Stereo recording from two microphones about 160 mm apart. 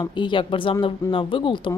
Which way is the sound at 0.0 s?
30° left (ahead or behind).